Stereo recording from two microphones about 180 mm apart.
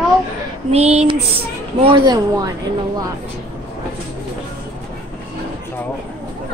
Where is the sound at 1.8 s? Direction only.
25° right (ahead or behind).